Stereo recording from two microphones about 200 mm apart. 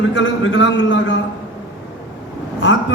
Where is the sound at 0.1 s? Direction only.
70° left (ahead or behind).